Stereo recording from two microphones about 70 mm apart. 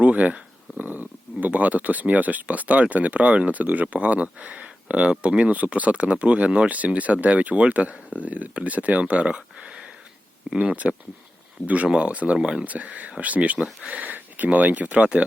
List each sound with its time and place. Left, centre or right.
0.0 s speech: centre